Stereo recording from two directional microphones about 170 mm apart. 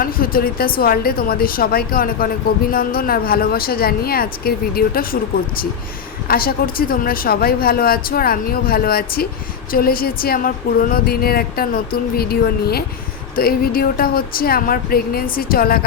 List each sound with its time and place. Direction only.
0.0 s speech: 60° left (ahead or behind)
6.2 s speech: 60° left (ahead or behind)